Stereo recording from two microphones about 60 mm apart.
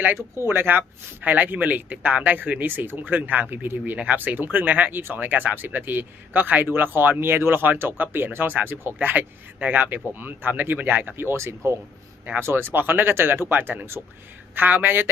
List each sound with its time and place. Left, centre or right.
0.4 s speech: right
3.9 s speech: centre
4.2 s speech: right